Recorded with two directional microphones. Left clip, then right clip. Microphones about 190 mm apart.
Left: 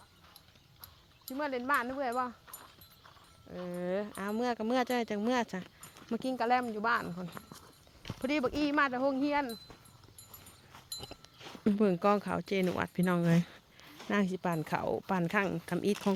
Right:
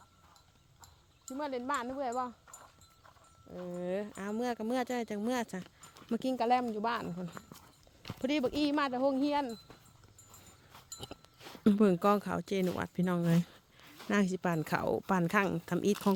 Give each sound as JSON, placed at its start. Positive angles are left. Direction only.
{"t": 1.3, "sound": "speech", "side_deg": -5}
{"t": 3.7, "sound": "speech", "side_deg": -10}
{"t": 6.1, "sound": "speech", "side_deg": -35}
{"t": 11.3, "sound": "a sound", "side_deg": -5}
{"t": 11.6, "sound": "speech", "side_deg": -35}
{"t": 14.1, "sound": "speech", "side_deg": -30}